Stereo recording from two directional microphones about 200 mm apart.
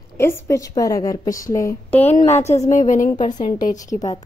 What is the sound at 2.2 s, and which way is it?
Speech, 35° left (ahead or behind).